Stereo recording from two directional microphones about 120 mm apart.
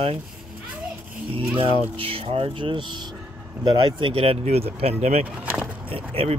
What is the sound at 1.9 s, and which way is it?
Speech, 50° right (ahead or behind).